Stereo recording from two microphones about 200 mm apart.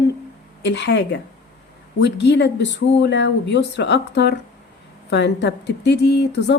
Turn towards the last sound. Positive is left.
turn(degrees=55)  # may be behind; listen again after turning